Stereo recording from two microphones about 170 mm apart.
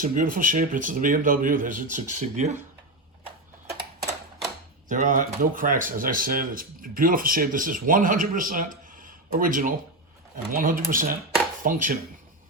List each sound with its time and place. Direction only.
0.0 s speech: 55° right (ahead or behind)
4.9 s speech: 50° right (ahead or behind)